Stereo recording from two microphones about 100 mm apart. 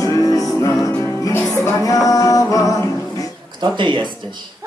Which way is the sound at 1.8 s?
35° left (ahead or behind).